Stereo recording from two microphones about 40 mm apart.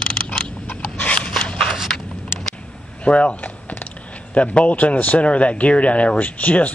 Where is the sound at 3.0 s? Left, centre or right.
Left.